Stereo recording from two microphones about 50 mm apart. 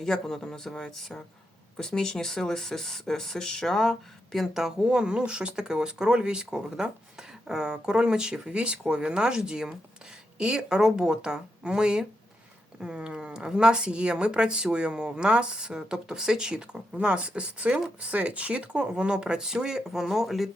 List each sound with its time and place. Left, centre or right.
0.0 s speech: centre
4.5 s speech: centre
18.0 s speech: right; by 20.5 s centre